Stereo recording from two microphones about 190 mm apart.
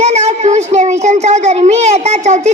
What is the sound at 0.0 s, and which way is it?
A child's voice, 35° right (ahead or behind).